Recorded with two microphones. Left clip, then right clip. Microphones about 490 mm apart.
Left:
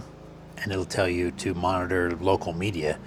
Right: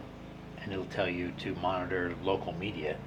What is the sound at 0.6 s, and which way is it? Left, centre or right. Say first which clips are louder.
Speech: left 7 dB; left.